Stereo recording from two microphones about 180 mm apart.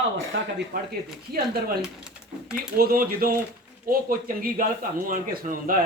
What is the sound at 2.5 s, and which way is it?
Speech, 55° right (ahead or behind).